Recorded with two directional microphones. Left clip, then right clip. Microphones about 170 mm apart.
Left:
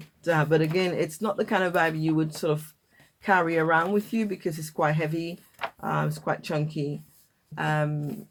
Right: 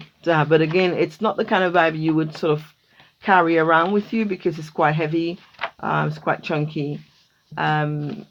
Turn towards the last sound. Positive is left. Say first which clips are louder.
# right 6 dB
turn(degrees=-35)  # may be behind; listen again after turning